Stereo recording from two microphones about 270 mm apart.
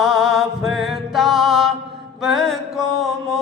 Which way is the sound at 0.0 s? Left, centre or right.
Centre.